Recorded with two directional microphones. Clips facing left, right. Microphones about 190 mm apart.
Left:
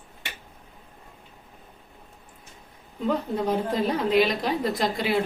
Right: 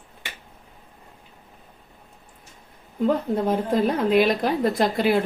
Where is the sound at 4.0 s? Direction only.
55° right (ahead or behind).